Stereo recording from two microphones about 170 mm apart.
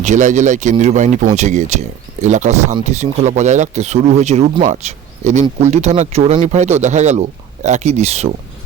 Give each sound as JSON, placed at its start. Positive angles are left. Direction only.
{"t": 0.0, "sound": "speech", "side_deg": -45}